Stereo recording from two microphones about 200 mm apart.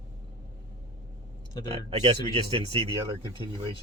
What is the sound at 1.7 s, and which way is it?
Speech, 25° right (ahead or behind).